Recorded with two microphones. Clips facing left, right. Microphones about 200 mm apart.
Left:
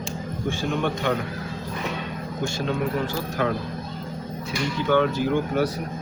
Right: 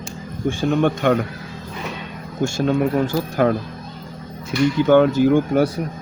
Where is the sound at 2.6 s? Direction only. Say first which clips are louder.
Right 8 dB; 45° right (ahead or behind).